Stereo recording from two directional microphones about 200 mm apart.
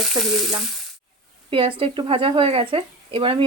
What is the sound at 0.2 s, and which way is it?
Speech, 20° right (ahead or behind).